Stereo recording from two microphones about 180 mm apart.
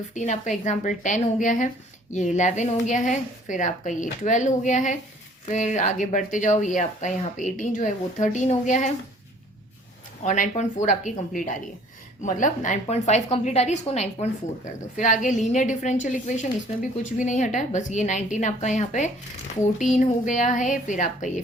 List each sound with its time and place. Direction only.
0.1 s a woman's voice: 40° left (ahead or behind)
10.2 s a woman's voice: 45° left (ahead or behind)
12.2 s a woman's voice: 45° left (ahead or behind)